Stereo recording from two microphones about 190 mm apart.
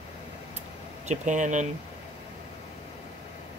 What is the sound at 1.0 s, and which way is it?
Speech, 40° right (ahead or behind).